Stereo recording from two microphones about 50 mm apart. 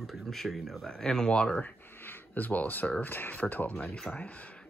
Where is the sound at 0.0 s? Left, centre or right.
Centre.